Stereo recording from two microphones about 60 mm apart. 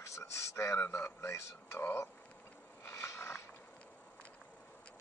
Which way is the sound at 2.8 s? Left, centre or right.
Left.